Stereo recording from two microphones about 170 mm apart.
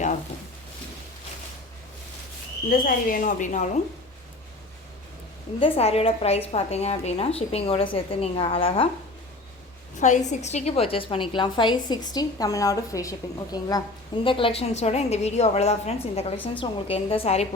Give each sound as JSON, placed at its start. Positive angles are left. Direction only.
{"t": 2.6, "sound": "speech", "side_deg": 55}
{"t": 5.5, "sound": "a woman's voice", "side_deg": 35}
{"t": 10.0, "sound": "a woman's voice", "side_deg": 45}